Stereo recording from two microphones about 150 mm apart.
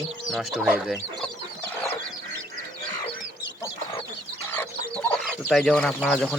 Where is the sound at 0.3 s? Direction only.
Centre (ahead or behind).